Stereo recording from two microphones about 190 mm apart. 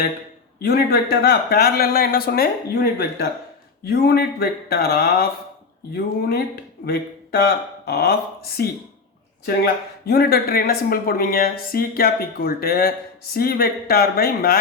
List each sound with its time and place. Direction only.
0.6 s speech: 50° left (ahead or behind)
10.1 s speech: 55° left (ahead or behind)